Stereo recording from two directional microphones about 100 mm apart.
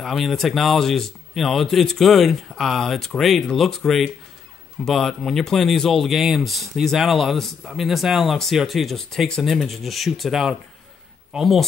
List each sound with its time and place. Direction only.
0.0 s speech: centre (ahead or behind)